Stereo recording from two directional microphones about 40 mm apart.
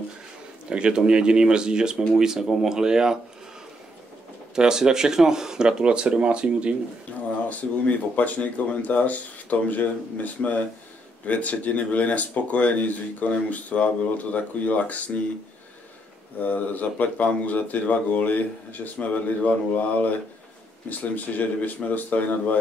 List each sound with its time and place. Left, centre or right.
0.7 s speech: right
4.6 s speech: centre
7.4 s speech: left
16.3 s speech: left